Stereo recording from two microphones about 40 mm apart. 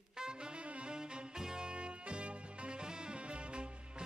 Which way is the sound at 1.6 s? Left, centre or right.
Right.